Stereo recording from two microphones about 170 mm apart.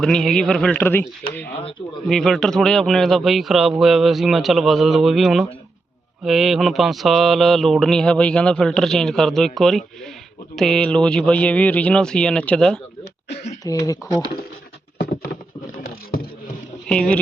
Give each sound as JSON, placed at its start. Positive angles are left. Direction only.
{"t": 0.0, "sound": "mantra", "side_deg": 5}
{"t": 2.0, "sound": "mantra", "side_deg": 5}
{"t": 13.7, "sound": "speech", "side_deg": 20}
{"t": 14.9, "sound": "a sound", "side_deg": 60}
{"t": 16.9, "sound": "mantra", "side_deg": 5}